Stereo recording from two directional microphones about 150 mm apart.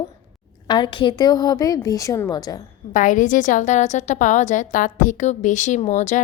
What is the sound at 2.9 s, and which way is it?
A woman's voice, 60° left (ahead or behind).